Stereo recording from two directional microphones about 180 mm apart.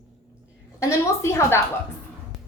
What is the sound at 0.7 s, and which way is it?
Speech, 15° left (ahead or behind).